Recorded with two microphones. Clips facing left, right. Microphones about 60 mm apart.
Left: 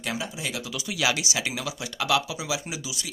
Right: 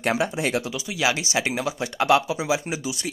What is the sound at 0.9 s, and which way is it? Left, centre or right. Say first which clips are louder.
Speech: right 3 dB; right.